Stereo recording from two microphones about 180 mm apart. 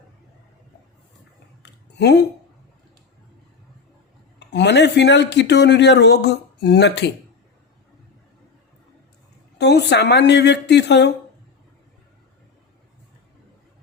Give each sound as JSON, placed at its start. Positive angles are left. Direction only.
{"t": 1.6, "sound": "a sound", "side_deg": 70}
{"t": 4.4, "sound": "a man's voice", "side_deg": 75}
{"t": 9.6, "sound": "a man's voice", "side_deg": 70}